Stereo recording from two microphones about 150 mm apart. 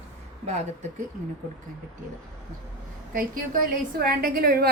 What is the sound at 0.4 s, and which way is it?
Speech, 50° right (ahead or behind).